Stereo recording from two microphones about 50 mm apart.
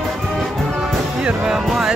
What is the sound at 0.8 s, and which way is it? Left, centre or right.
Music, centre.